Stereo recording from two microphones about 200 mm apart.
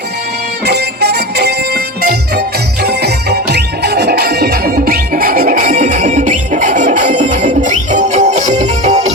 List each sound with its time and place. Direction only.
0.6 s music: 55° right (ahead or behind); by 8.9 s 35° right (ahead or behind)